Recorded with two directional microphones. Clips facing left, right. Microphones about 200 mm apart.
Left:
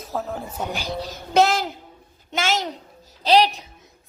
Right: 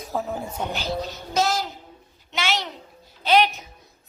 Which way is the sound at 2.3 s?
45° left (ahead or behind).